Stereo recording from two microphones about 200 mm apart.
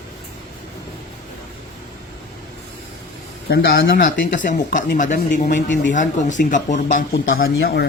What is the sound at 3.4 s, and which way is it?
Speech, 50° left (ahead or behind).